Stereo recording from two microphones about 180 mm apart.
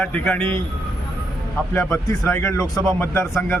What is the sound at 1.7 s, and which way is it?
A man's voice, 15° left (ahead or behind).